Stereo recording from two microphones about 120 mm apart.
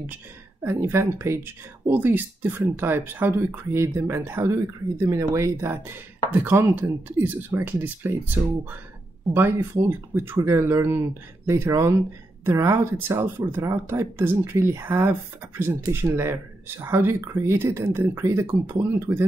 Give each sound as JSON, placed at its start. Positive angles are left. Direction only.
{"t": 0.7, "sound": "speech", "side_deg": -20}